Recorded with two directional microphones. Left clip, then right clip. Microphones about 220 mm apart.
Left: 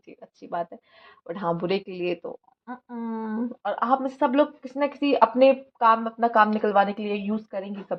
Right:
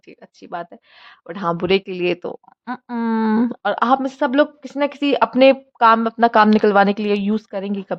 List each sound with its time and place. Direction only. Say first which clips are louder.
0.1 s speech: right 2 dB; 20° right (ahead or behind)
2.3 s speech: right 9 dB; 35° right (ahead or behind)
4.9 s speech: right 1 dB; 30° right (ahead or behind)